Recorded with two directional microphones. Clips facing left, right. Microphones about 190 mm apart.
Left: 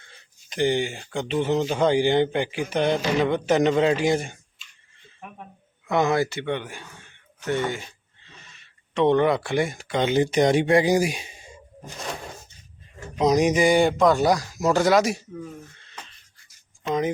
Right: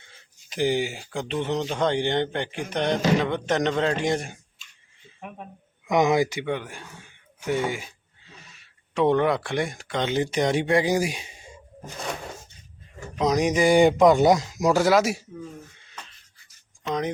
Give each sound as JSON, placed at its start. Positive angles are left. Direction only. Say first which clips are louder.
{"t": 0.1, "sound": "speech", "louder": "even", "side_deg": -5}
{"t": 5.9, "sound": "speech", "louder": "right 1 dB", "side_deg": -15}
{"t": 13.1, "sound": "speech", "louder": "left 3 dB", "side_deg": 10}
{"t": 13.7, "sound": "speech", "louder": "right 2 dB", "side_deg": -15}
{"t": 14.7, "sound": "speech", "louder": "left 1 dB", "side_deg": -5}
{"t": 16.8, "sound": "speech", "louder": "left 3 dB", "side_deg": 5}